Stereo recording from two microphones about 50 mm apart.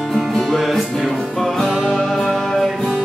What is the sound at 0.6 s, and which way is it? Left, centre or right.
Music, centre.